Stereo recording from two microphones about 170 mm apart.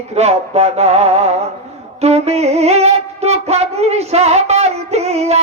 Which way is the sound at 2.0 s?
40° right (ahead or behind).